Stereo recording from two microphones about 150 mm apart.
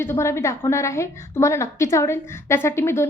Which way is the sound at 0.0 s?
15° left (ahead or behind).